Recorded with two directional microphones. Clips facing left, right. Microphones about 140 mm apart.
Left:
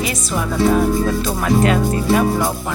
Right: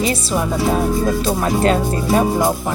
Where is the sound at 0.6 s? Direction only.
15° right (ahead or behind).